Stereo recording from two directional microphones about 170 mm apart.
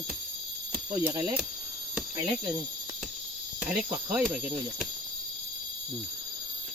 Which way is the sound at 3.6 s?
5° right (ahead or behind).